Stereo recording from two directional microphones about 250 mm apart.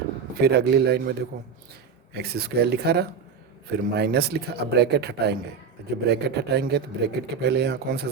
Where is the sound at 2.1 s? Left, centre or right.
Right.